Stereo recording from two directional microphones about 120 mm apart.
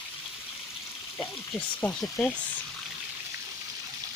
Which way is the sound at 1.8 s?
10° left (ahead or behind).